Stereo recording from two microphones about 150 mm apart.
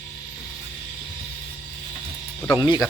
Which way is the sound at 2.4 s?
20° left (ahead or behind).